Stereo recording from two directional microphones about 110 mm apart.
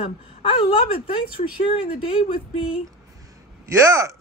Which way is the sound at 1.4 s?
75° left (ahead or behind).